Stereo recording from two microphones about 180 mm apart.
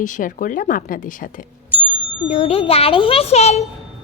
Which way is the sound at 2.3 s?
35° left (ahead or behind).